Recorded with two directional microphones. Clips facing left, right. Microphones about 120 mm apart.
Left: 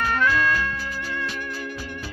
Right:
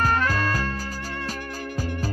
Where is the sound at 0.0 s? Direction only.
40° right (ahead or behind).